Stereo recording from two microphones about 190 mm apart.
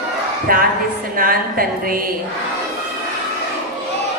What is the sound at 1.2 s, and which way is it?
Speech, 50° right (ahead or behind).